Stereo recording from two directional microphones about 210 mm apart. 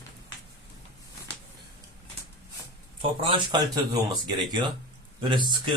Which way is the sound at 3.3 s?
20° right (ahead or behind).